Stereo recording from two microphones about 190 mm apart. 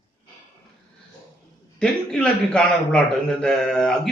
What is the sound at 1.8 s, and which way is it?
A man's voice, 5° left (ahead or behind).